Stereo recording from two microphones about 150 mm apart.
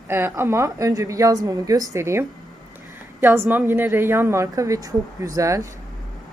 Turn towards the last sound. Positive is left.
turn(degrees=-20)  # may be behind; listen again after turning